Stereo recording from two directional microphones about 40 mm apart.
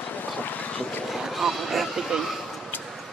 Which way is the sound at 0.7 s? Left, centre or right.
Left.